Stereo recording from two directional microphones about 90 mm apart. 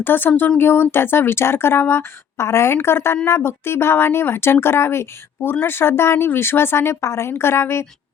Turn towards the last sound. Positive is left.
turn(degrees=30)  # may be behind; listen again after turning